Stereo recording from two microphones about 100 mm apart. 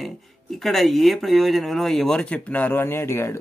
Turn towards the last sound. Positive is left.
turn(degrees=25)  # may be behind; listen again after turning